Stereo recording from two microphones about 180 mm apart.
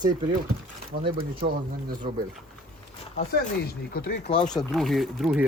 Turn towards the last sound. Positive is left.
turn(degrees=0)  # may be behind; listen again after turning